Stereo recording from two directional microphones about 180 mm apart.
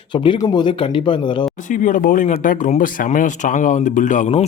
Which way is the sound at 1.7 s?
45° left (ahead or behind).